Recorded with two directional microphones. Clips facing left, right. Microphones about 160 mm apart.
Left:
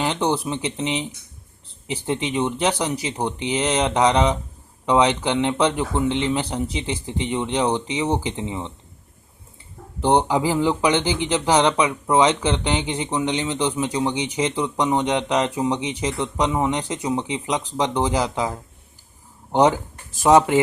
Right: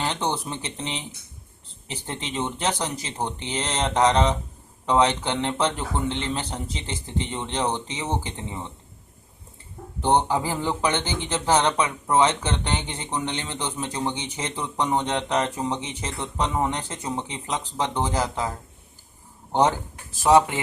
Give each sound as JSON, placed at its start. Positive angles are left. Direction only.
{"t": 0.0, "sound": "speech", "side_deg": 10}
{"t": 10.0, "sound": "speech", "side_deg": 10}
{"t": 19.5, "sound": "speech", "side_deg": 15}